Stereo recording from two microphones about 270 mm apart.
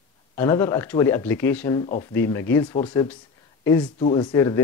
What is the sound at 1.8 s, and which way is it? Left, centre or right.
Speech, left.